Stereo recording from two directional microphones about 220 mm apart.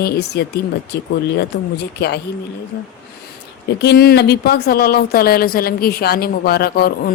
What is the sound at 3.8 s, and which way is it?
Speech, 45° left (ahead or behind).